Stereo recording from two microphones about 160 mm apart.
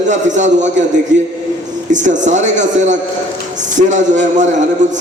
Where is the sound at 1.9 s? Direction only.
50° right (ahead or behind).